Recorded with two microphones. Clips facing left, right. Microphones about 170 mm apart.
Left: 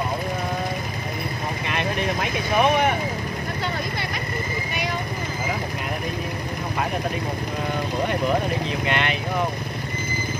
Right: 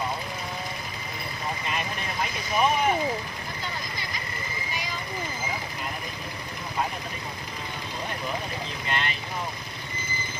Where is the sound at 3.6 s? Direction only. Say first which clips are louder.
Left 7 dB; 65° left (ahead or behind).